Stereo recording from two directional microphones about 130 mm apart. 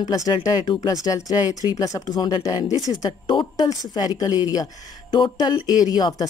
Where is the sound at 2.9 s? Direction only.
35° left (ahead or behind).